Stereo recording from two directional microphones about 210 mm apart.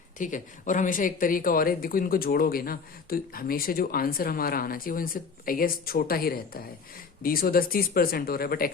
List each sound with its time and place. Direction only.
0.2 s speech: 40° left (ahead or behind)